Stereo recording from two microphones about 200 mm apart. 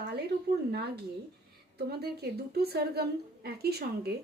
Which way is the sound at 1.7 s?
50° right (ahead or behind).